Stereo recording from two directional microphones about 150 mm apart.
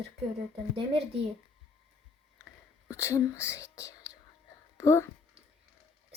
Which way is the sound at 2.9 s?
20° left (ahead or behind).